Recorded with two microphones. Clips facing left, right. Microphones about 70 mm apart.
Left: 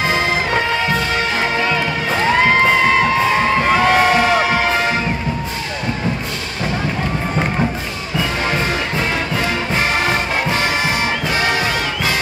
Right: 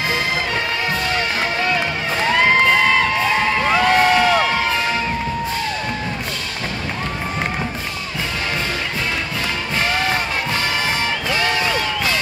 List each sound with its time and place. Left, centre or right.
2.2 s music: centre
3.6 s crowd: left
11.3 s music: left